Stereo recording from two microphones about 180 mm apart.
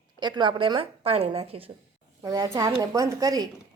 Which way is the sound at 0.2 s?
25° right (ahead or behind).